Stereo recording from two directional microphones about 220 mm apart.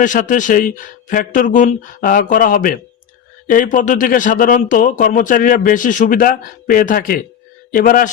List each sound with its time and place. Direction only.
0.0 s speech: 35° left (ahead or behind)